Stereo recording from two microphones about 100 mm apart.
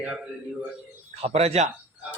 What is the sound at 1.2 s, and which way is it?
Speech, 90° right.